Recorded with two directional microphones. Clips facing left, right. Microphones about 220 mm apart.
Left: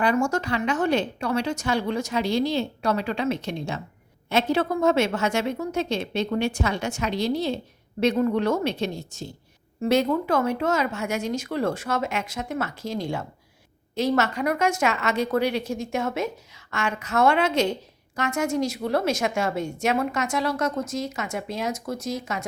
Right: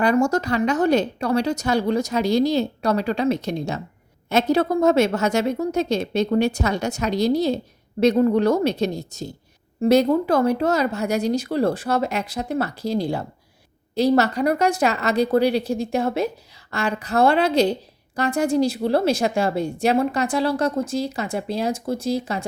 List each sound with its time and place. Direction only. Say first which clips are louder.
0.0 s a woman's voice: right 4 dB; 40° right (ahead or behind)